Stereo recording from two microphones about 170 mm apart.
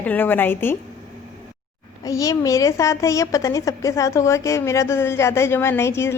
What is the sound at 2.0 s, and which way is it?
A woman's voice, 20° left (ahead or behind).